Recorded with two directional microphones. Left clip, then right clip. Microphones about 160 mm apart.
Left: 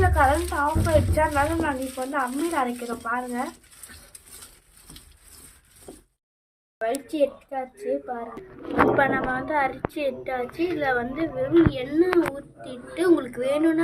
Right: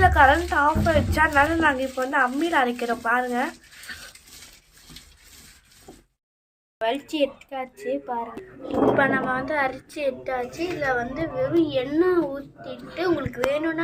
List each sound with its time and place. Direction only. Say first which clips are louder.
0.0 s a woman's voice: right 4 dB; 15° right (ahead or behind)
6.7 s speech: even; centre (ahead or behind)
13.0 s a woman's voice: left 4 dB; 25° left (ahead or behind)
13.2 s a woman's voice: left 1 dB; 15° left (ahead or behind)